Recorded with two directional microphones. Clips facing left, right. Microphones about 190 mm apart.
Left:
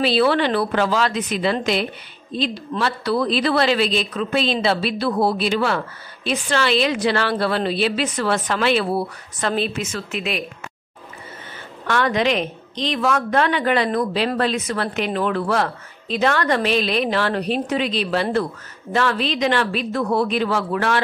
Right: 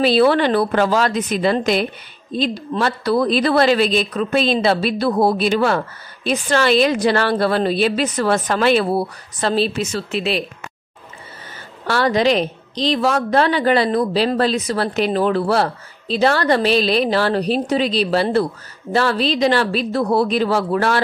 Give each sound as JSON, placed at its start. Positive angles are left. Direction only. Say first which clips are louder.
{"t": 0.0, "sound": "a woman's voice", "louder": "right 3 dB", "side_deg": -45}
{"t": 11.8, "sound": "a woman's voice", "louder": "right 3 dB", "side_deg": -35}